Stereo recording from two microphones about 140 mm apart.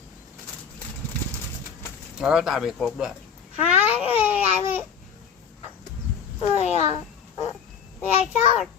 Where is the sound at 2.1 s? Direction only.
5° right (ahead or behind).